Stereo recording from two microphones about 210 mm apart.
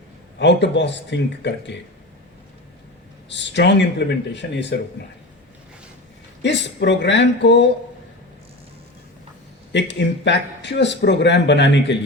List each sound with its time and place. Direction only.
0.3 s speech: 55° left (ahead or behind)
3.2 s speech: 55° left (ahead or behind)
6.4 s speech: 55° left (ahead or behind)
9.7 s speech: 55° left (ahead or behind)